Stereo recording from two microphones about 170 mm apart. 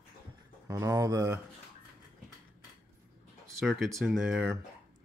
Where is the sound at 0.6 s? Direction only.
20° right (ahead or behind).